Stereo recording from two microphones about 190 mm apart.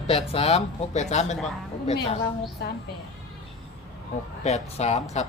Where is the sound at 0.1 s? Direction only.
30° left (ahead or behind).